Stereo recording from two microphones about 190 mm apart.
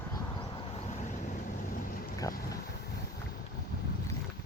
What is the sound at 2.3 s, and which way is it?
Speech, 20° left (ahead or behind).